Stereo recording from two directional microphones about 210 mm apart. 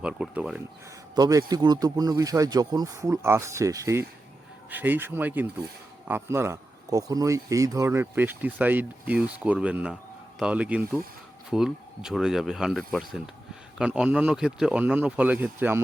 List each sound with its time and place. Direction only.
0.0 s speech: 5° right (ahead or behind)
1.1 s speech: 15° right (ahead or behind)